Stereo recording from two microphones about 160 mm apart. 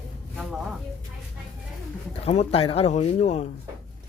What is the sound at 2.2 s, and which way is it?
Speech, 40° left (ahead or behind).